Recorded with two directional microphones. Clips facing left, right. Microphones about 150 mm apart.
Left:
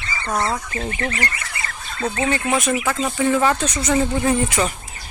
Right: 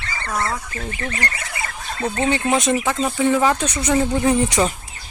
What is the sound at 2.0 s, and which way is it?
Speech, 25° right (ahead or behind).